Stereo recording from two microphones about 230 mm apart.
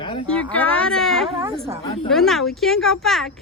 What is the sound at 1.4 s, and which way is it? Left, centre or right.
Speech, right.